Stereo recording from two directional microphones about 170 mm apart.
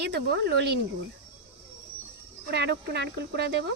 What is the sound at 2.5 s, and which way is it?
Speech, 80° right.